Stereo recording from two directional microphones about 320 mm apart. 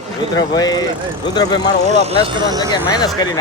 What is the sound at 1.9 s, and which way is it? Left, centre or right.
Speech, centre.